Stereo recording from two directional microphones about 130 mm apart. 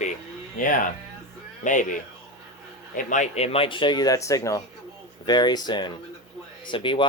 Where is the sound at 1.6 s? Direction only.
80° left.